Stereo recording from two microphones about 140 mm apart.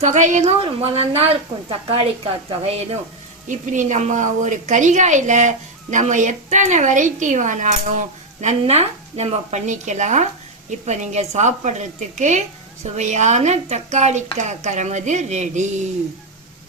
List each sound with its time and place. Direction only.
0.0 s a woman's voice: 60° right (ahead or behind)
0.6 s a woman's voice: 45° right (ahead or behind)
3.5 s a woman's voice: 65° right (ahead or behind)